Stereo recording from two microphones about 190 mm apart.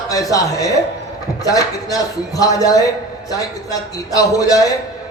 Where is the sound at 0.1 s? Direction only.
20° left (ahead or behind).